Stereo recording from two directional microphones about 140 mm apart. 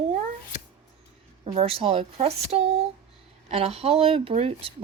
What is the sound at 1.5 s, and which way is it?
A woman's voice, 40° right (ahead or behind).